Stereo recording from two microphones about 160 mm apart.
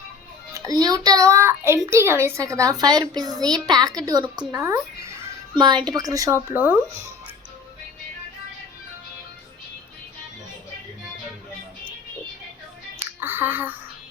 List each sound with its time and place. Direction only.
0.5 s a child's voice: 20° right (ahead or behind)
6.5 s speech: 10° right (ahead or behind)
13.2 s speech: 10° right (ahead or behind)